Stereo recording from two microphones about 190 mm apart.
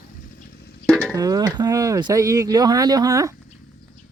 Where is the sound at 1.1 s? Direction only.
20° right (ahead or behind).